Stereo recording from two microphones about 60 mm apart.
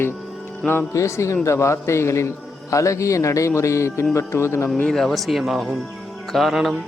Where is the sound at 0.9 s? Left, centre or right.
Left.